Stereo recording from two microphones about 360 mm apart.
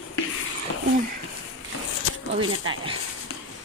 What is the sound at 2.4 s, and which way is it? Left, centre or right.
Speech, right.